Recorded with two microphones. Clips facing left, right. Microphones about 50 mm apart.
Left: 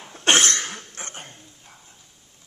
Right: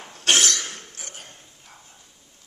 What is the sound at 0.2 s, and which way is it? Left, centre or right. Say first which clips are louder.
Cough: left 2 dB; left.